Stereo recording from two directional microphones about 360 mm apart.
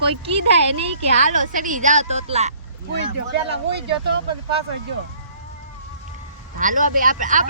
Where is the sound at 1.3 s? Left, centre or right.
Right.